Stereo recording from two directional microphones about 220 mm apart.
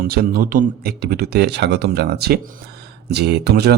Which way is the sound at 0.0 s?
40° right (ahead or behind).